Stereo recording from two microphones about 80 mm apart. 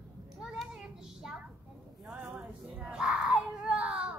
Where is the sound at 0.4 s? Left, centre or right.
Centre.